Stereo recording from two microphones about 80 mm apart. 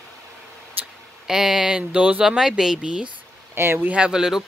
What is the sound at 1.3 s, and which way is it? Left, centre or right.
Speech, centre.